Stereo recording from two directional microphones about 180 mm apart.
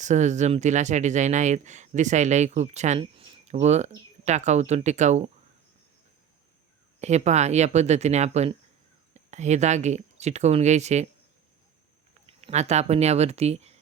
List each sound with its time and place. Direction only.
0.0 s speech: 40° right (ahead or behind)
7.0 s speech: 40° right (ahead or behind)
12.2 s speech: 35° right (ahead or behind)